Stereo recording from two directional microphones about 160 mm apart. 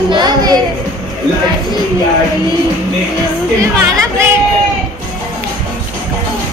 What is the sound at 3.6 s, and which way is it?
Speech, 20° right (ahead or behind).